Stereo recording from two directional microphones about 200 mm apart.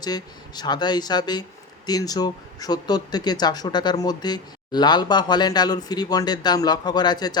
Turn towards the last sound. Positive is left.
turn(degrees=20)  # may be behind; listen again after turning